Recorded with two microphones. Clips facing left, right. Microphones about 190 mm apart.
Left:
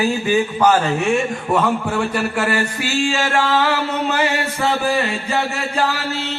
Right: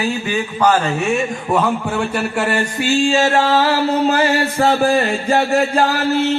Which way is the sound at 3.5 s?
40° right (ahead or behind).